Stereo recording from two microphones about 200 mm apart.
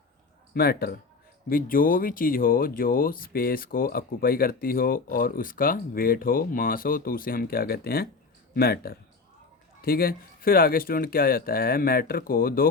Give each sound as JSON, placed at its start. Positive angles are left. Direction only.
{"t": 0.5, "sound": "speech", "side_deg": 50}